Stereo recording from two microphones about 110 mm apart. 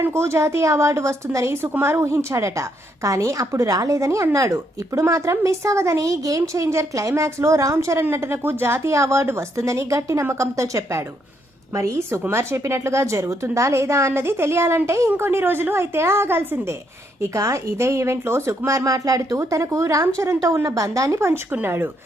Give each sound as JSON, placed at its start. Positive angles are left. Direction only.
{"t": 0.0, "sound": "a woman's voice", "side_deg": -25}